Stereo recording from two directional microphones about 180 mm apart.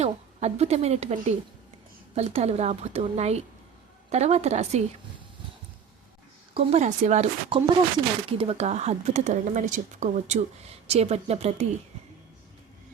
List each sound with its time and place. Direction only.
0.0 s speech: 35° right (ahead or behind)
6.5 s speech: 35° right (ahead or behind)